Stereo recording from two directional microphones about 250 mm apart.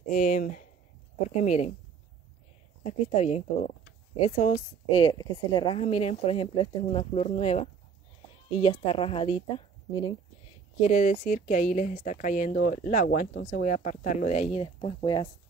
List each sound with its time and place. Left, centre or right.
0.1 s a woman's voice: left
2.8 s a woman's voice: left
10.9 s speech: left